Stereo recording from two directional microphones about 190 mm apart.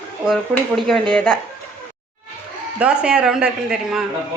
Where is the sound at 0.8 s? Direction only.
Centre (ahead or behind).